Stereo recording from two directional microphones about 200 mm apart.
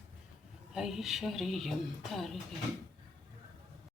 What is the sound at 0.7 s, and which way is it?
Speech, centre (ahead or behind).